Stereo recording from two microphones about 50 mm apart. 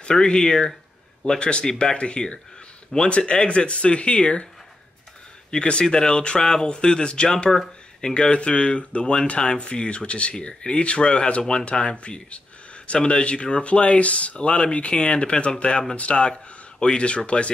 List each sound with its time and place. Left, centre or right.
0.0 s speech: centre
5.5 s speech: centre